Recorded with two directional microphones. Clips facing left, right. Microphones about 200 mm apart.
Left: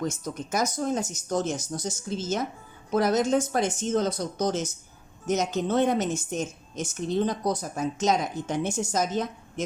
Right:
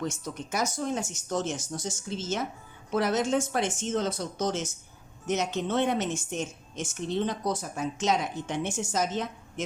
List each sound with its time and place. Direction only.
0.0 s a woman's voice: 45° left (ahead or behind)